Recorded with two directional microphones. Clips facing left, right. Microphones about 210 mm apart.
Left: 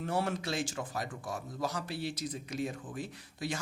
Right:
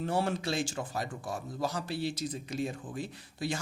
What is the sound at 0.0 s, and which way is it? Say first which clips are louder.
Speech: right 2 dB; 30° right (ahead or behind).